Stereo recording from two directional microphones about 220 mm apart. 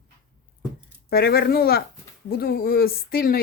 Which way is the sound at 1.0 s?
45° left (ahead or behind).